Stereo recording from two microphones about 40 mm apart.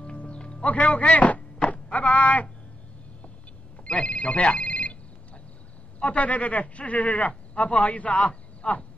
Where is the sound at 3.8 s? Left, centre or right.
Left.